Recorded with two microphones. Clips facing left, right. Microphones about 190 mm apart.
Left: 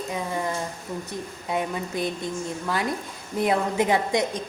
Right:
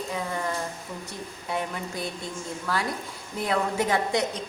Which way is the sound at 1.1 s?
20° left (ahead or behind).